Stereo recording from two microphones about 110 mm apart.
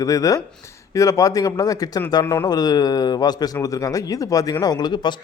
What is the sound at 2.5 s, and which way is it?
A man's voice, 35° left (ahead or behind).